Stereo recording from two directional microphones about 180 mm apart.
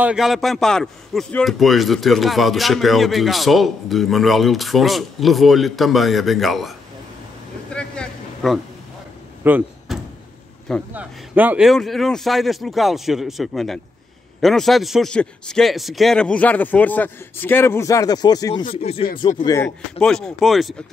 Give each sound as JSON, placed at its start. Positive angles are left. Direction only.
{"t": 0.0, "sound": "a man's voice", "side_deg": -5}
{"t": 7.7, "sound": "a sound", "side_deg": 5}
{"t": 9.4, "sound": "door", "side_deg": -10}
{"t": 10.9, "sound": "a man's voice", "side_deg": -10}
{"t": 19.3, "sound": "speech", "side_deg": 20}
{"t": 19.6, "sound": "a man's voice", "side_deg": 5}